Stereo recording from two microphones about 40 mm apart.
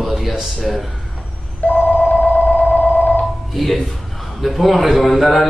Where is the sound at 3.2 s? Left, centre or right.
Centre.